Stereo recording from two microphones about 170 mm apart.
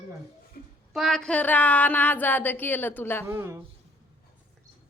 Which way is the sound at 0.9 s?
Centre (ahead or behind).